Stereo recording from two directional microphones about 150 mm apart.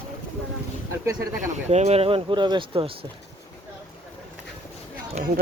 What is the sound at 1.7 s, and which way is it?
Speech, 45° right (ahead or behind).